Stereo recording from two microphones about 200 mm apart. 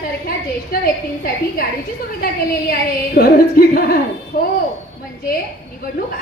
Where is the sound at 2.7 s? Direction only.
50° left (ahead or behind).